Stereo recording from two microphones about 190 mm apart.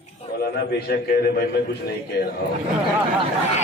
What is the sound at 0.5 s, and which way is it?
Speech, 55° left (ahead or behind).